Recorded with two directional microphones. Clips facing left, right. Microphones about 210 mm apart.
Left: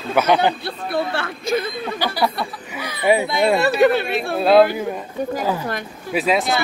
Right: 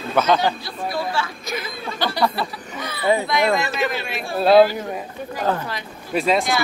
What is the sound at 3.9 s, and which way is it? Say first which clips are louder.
Speech: left 8 dB; 60° left (ahead or behind).